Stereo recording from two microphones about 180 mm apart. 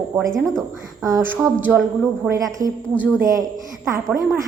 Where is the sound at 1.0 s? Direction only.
15° right (ahead or behind).